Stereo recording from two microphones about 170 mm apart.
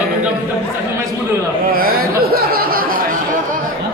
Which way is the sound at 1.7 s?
60° right (ahead or behind).